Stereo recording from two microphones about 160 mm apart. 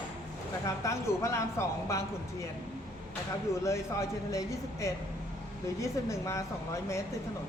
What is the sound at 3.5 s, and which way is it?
Speech, 20° left (ahead or behind).